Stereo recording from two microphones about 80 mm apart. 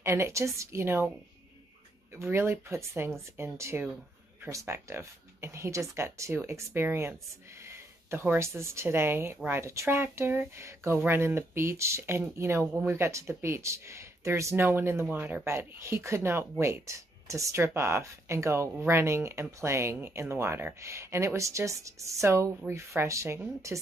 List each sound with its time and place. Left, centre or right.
0.0 s speech: right
2.1 s speech: right